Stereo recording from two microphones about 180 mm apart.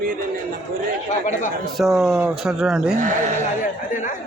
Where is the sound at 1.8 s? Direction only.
Centre (ahead or behind).